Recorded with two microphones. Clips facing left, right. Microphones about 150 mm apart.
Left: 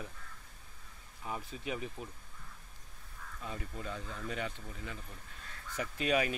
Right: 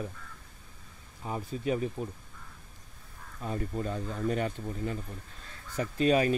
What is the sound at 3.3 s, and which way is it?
Speech, 40° right (ahead or behind).